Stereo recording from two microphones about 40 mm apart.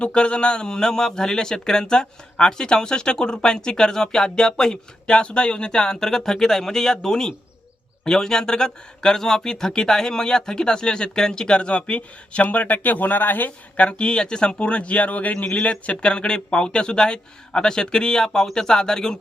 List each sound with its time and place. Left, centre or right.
0.0 s speech: left
13.7 s a man's voice: left
15.6 s speech: left